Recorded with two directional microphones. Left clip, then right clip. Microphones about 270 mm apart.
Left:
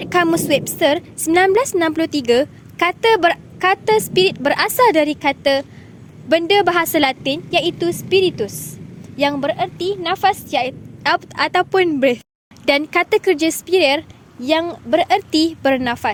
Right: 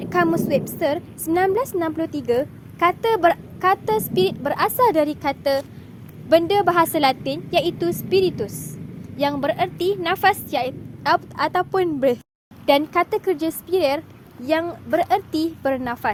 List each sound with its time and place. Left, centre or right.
0.0 s a woman's voice: left